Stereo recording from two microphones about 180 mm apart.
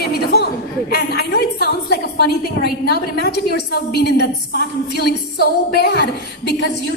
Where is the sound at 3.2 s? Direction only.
60° left (ahead or behind).